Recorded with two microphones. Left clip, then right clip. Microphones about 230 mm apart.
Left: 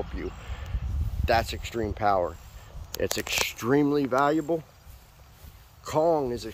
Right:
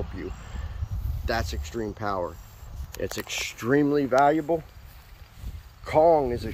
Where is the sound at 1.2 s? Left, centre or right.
Centre.